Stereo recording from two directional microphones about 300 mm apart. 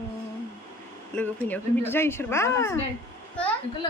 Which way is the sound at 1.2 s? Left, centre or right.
Centre.